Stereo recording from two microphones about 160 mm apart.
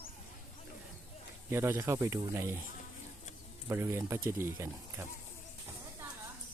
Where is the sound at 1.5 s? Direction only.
15° right (ahead or behind).